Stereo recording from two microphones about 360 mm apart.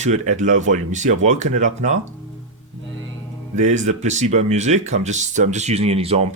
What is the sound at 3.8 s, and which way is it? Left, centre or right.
Speech, centre.